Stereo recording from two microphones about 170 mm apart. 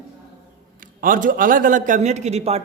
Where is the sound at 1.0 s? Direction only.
55° right (ahead or behind); by 2.6 s 40° right (ahead or behind).